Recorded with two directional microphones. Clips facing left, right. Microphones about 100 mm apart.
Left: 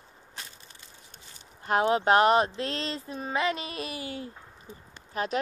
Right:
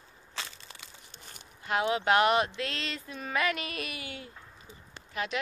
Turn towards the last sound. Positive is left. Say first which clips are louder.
# left 4 dB
turn(degrees=40)  # may be behind; listen again after turning